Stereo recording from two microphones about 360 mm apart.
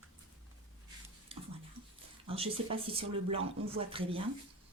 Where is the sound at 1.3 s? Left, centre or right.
Centre.